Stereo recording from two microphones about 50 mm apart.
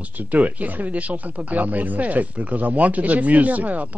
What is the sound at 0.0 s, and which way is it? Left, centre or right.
Speech, right.